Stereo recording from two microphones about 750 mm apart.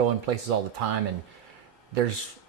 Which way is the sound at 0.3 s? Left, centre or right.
Right.